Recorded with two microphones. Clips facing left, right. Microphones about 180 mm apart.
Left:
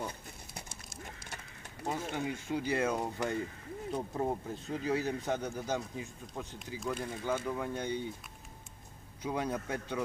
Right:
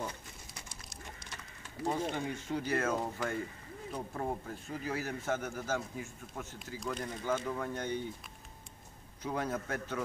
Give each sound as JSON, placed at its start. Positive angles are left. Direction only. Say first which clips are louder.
{"t": 1.9, "sound": "speech", "louder": "right 1 dB", "side_deg": 10}
{"t": 6.8, "sound": "speech", "louder": "left 2 dB", "side_deg": 10}
{"t": 9.2, "sound": "speech", "louder": "left 1 dB", "side_deg": 15}